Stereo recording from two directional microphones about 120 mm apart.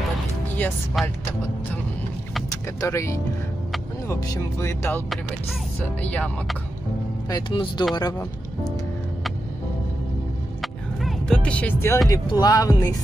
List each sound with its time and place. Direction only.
0.6 s speech: 15° left (ahead or behind)
1.0 s speech: centre (ahead or behind)
2.8 s music: 25° left (ahead or behind)
5.9 s speech: 10° left (ahead or behind)
7.2 s speech: 40° left (ahead or behind)
7.9 s speech: 35° left (ahead or behind)
10.6 s music: centre (ahead or behind); by 12.0 s 15° left (ahead or behind)
12.3 s music: 30° left (ahead or behind)